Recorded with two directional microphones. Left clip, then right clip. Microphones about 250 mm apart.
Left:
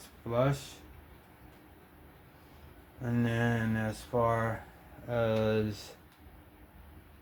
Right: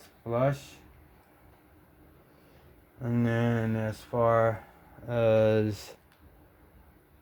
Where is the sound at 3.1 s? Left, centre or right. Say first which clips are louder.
Right 3 dB; right.